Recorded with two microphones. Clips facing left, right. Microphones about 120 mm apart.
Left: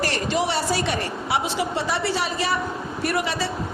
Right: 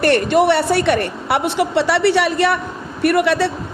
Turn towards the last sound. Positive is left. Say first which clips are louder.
# right 9 dB
turn(degrees=-65)  # may be behind; listen again after turning